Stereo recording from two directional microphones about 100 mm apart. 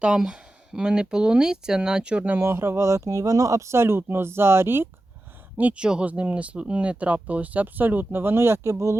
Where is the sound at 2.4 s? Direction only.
25° right (ahead or behind).